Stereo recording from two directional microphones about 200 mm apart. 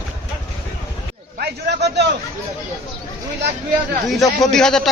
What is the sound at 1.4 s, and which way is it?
Speech, 55° right (ahead or behind).